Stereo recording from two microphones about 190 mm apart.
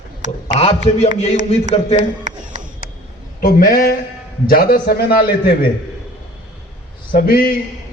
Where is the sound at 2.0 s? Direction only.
40° right (ahead or behind).